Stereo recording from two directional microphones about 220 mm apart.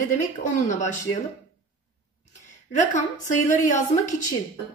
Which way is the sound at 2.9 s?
35° left (ahead or behind).